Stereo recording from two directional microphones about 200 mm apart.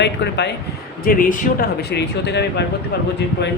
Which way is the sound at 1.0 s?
45° left (ahead or behind).